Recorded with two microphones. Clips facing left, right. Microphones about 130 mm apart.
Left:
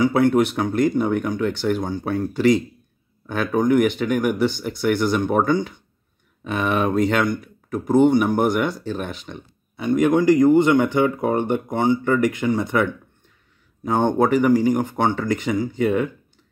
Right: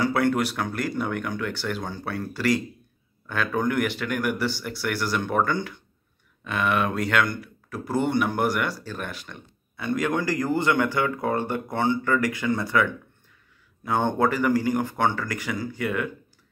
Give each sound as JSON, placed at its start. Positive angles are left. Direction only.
{"t": 0.0, "sound": "speech", "side_deg": 20}
{"t": 13.8, "sound": "speech", "side_deg": 15}